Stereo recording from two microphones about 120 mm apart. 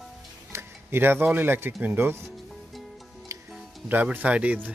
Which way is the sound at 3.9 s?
15° right (ahead or behind).